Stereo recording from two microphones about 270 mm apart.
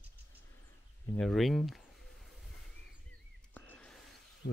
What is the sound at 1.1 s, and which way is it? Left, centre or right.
Speech, centre.